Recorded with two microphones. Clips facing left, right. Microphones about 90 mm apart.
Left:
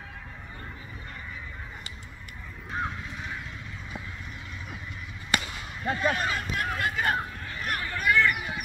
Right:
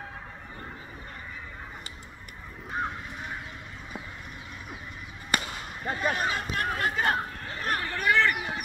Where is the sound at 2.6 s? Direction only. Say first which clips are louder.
Even; 10° right (ahead or behind).